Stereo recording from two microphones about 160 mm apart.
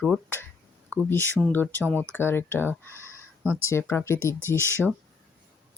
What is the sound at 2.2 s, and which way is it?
Speech, 15° left (ahead or behind).